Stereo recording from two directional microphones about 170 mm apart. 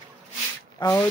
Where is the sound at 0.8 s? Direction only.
20° left (ahead or behind).